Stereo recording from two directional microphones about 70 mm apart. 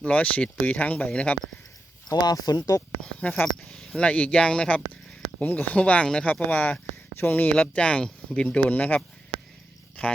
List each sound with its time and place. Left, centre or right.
0.0 s speech: centre
2.0 s speech: left
3.2 s speech: centre
5.4 s speech: left
7.5 s speech: centre